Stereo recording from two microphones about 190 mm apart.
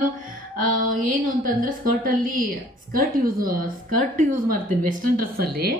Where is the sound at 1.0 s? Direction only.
45° right (ahead or behind).